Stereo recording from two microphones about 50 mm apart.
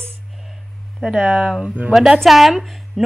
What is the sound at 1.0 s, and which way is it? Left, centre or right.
A woman's voice, centre.